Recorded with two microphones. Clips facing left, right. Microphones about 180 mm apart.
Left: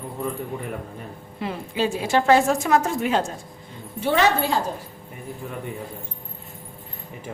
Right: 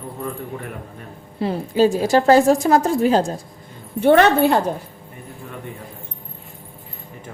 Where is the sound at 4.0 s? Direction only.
55° right (ahead or behind).